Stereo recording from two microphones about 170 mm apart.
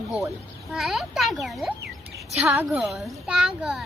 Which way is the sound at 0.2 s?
Centre (ahead or behind).